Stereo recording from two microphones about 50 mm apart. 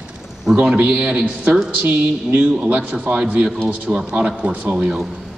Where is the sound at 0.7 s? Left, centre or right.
Right.